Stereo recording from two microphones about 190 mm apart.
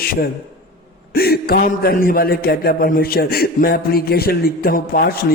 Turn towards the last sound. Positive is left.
turn(degrees=50)  # may be behind; listen again after turning